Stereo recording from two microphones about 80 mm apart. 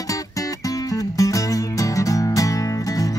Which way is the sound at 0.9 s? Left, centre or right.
Left.